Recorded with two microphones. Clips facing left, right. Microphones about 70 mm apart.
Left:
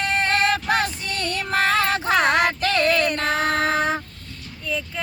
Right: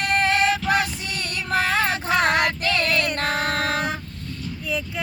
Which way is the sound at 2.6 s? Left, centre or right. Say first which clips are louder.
Left 3 dB; left.